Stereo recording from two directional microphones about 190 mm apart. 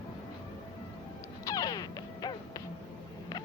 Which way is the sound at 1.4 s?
20° left (ahead or behind).